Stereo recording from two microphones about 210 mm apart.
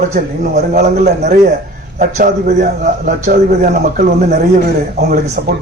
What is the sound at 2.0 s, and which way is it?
A man's voice, 35° right (ahead or behind).